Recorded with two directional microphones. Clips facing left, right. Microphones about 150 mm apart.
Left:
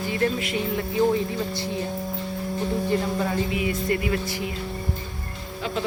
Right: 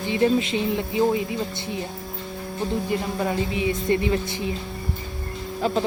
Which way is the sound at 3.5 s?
25° right (ahead or behind).